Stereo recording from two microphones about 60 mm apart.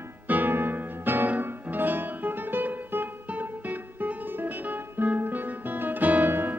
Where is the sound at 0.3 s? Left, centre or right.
Right.